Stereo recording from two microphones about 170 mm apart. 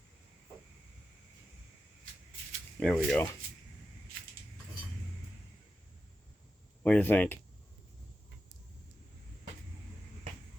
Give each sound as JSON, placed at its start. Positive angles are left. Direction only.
{"t": 2.8, "sound": "speech", "side_deg": 5}
{"t": 6.8, "sound": "speech", "side_deg": 10}